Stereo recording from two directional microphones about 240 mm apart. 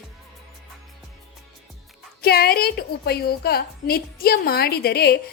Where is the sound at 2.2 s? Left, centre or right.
Left.